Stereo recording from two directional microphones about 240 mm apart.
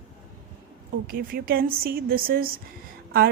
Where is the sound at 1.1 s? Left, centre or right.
Right.